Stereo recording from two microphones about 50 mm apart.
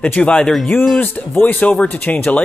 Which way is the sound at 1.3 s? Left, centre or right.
Left.